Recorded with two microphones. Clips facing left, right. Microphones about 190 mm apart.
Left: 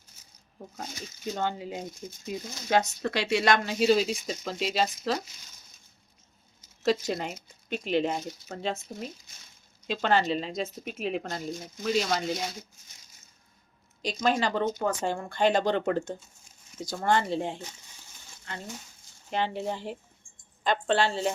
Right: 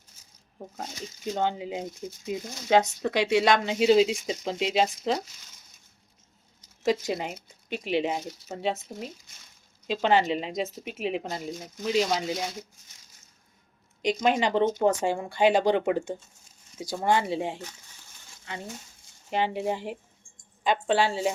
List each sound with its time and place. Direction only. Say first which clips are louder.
1.4 s speech: right 4 dB; 15° right (ahead or behind)
1.7 s speech: right 3 dB; 5° right (ahead or behind)
6.8 s speech: right 1 dB; 10° right (ahead or behind)
9.9 s speech: right 2 dB; 15° right (ahead or behind)
14.0 s speech: right 3 dB; 15° right (ahead or behind)
15.0 s speech: right 3 dB; 10° right (ahead or behind)
19.3 s speech: right 3 dB; 10° right (ahead or behind)